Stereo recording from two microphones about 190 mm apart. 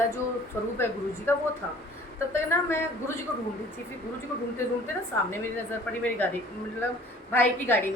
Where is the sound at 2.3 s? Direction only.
15° left (ahead or behind).